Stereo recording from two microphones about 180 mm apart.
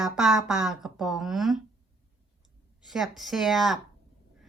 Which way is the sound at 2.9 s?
Centre (ahead or behind).